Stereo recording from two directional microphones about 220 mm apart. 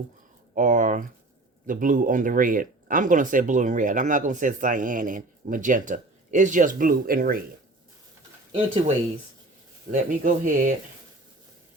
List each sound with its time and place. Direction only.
0.5 s speech: 35° right (ahead or behind)
9.9 s speech: 35° right (ahead or behind)